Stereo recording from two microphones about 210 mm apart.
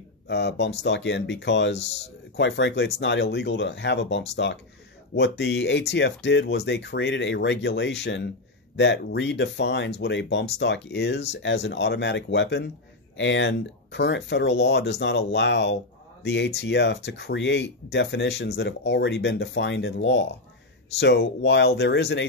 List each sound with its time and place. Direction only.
0.3 s speech: 55° left (ahead or behind)